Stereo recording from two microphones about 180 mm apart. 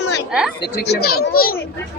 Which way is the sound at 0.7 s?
65° left (ahead or behind).